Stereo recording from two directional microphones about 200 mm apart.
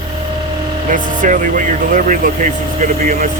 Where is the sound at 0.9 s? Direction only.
40° right (ahead or behind).